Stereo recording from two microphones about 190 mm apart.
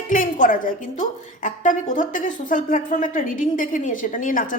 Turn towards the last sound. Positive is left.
turn(degrees=45)  # may be behind; listen again after turning